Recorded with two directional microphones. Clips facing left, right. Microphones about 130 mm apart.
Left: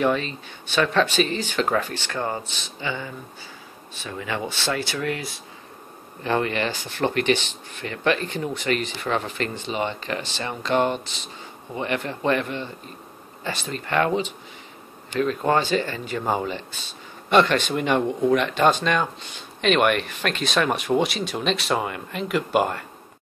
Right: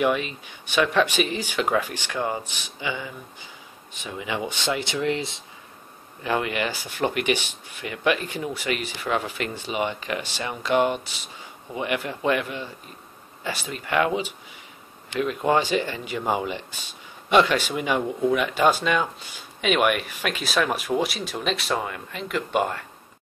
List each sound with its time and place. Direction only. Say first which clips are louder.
0.0 s speech: left 1 dB; 10° right (ahead or behind)
6.2 s speech: left 2 dB; 10° right (ahead or behind)